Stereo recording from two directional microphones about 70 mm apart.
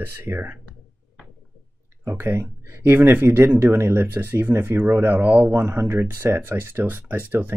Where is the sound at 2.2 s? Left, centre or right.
Right.